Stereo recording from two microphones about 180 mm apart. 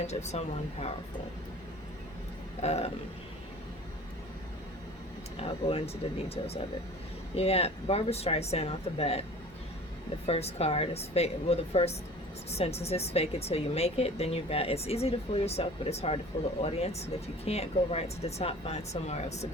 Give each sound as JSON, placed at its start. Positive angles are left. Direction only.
{"t": 0.1, "sound": "speech", "side_deg": 35}
{"t": 2.6, "sound": "speech", "side_deg": 35}
{"t": 5.4, "sound": "speech", "side_deg": 30}
{"t": 10.2, "sound": "speech", "side_deg": 35}